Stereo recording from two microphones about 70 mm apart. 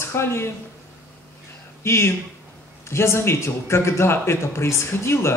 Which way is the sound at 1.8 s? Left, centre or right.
Left.